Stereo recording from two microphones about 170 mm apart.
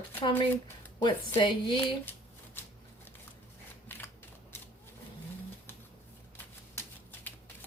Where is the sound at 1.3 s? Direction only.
30° left (ahead or behind).